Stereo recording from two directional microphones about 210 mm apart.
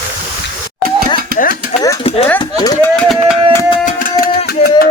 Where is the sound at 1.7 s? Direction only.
20° left (ahead or behind).